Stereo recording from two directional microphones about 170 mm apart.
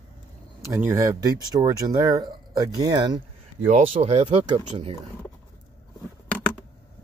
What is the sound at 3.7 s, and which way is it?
Speech, 40° right (ahead or behind).